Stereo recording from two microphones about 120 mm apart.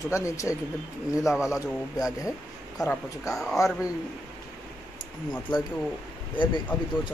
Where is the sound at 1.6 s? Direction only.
30° left (ahead or behind).